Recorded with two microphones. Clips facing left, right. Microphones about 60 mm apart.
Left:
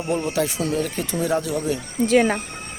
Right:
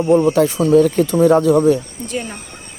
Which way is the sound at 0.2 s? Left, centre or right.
Right.